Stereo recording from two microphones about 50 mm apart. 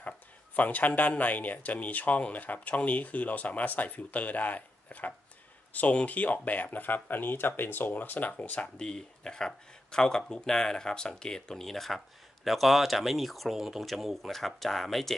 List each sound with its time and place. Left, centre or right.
0.6 s speech: left; by 15.1 s centre